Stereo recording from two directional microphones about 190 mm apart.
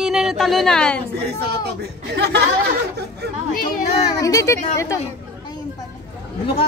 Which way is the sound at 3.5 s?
45° left (ahead or behind).